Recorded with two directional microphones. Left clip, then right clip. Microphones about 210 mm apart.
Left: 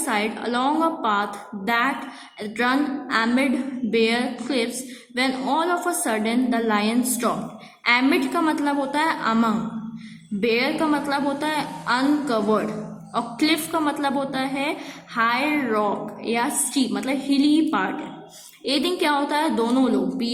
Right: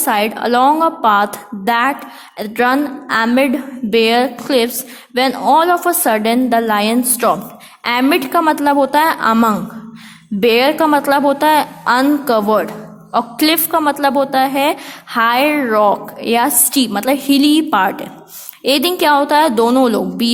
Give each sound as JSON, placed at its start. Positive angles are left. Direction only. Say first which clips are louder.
{"t": 0.0, "sound": "a woman's voice", "louder": "right 9 dB", "side_deg": -45}